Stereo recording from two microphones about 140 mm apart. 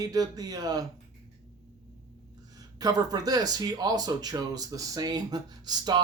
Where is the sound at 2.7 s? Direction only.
30° right (ahead or behind).